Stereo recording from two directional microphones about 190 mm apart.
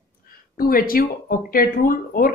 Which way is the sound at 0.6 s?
50° left (ahead or behind).